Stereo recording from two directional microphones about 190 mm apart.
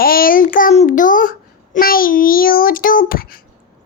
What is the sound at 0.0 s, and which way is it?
A child's voice, 50° left (ahead or behind).